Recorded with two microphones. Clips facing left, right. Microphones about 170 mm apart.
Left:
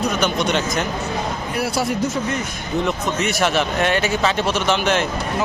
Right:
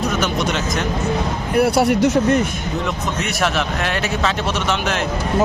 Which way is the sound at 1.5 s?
60° right (ahead or behind).